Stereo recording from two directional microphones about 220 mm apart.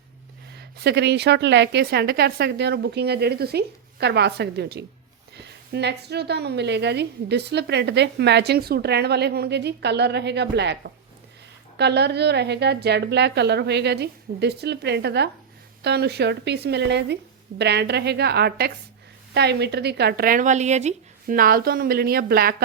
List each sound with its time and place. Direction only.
0.5 s a woman's voice: 50° right (ahead or behind)